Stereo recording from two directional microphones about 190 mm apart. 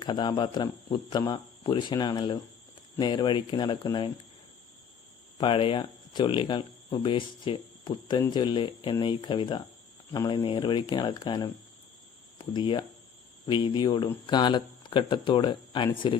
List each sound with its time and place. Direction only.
0.0 s speech: 25° left (ahead or behind)
5.4 s speech: 30° left (ahead or behind)